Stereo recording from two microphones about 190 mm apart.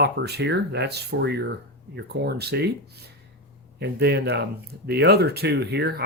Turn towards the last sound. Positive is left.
turn(degrees=-60)  # may be behind; listen again after turning